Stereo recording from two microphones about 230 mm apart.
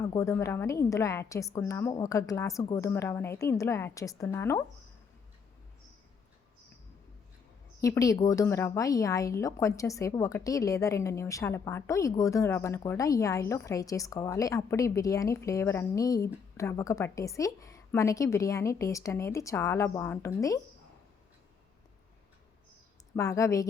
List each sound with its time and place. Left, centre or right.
0.0 s speech: centre
7.8 s speech: centre
23.1 s speech: centre